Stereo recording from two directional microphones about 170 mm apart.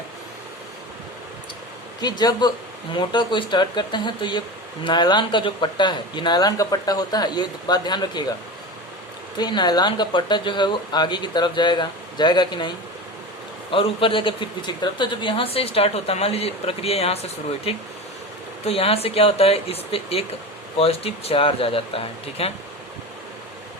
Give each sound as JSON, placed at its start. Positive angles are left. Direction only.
{"t": 2.0, "sound": "speech", "side_deg": 25}
{"t": 9.4, "sound": "a man's voice", "side_deg": 25}